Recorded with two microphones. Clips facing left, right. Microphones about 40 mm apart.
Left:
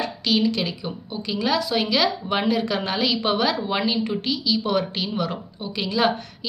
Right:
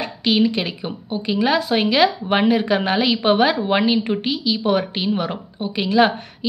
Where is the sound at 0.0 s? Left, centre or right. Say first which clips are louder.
Right 3 dB; right.